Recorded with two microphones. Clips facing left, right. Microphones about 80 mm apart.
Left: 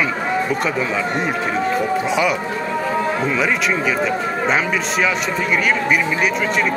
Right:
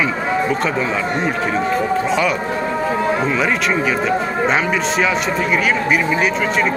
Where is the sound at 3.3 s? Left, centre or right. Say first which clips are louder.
Right 1 dB; centre.